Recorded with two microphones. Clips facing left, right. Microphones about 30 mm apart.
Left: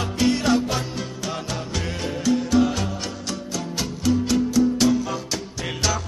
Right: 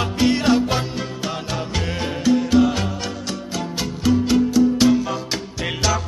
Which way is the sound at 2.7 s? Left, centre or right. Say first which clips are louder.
Right 3 dB; right.